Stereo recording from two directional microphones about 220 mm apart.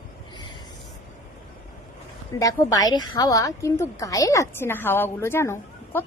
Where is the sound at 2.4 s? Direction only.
15° left (ahead or behind).